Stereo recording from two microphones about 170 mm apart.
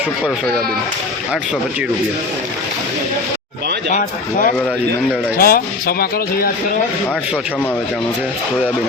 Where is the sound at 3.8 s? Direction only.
50° left (ahead or behind).